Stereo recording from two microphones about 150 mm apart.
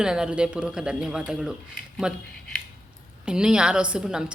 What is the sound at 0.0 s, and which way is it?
A woman's voice, 5° right (ahead or behind).